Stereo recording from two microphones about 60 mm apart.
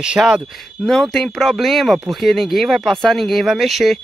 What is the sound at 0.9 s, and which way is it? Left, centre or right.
Speech, centre.